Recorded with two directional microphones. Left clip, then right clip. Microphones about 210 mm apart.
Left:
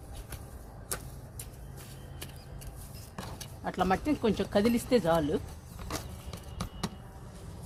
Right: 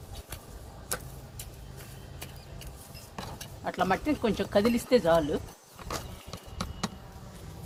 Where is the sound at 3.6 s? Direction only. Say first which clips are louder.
Right 1 dB; 30° left (ahead or behind).